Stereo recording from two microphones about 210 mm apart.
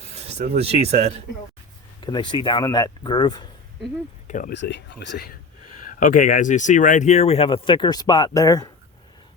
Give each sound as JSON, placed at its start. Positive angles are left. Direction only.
{"t": 0.1, "sound": "speech", "side_deg": -30}
{"t": 2.0, "sound": "speech", "side_deg": 20}
{"t": 4.3, "sound": "speech", "side_deg": 40}
{"t": 4.5, "sound": "speech", "side_deg": 55}